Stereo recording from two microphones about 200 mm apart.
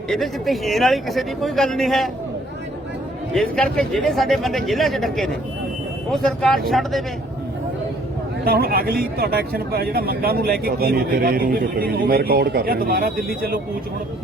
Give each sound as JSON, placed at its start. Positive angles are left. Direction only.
{"t": 0.1, "sound": "speech", "side_deg": 0}
{"t": 3.3, "sound": "speech", "side_deg": 5}
{"t": 8.4, "sound": "speech", "side_deg": -50}